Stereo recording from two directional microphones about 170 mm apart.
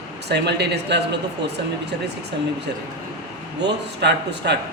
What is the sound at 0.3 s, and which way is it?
Speech, 80° right.